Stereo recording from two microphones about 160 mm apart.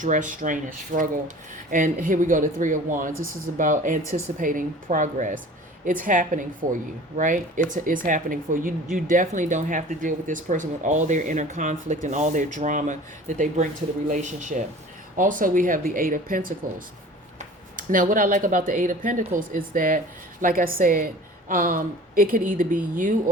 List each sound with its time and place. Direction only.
0.0 s speech: 55° right (ahead or behind)